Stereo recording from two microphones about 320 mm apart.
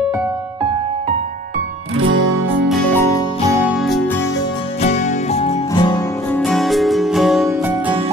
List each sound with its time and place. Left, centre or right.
4.8 s music: left
6.4 s music: centre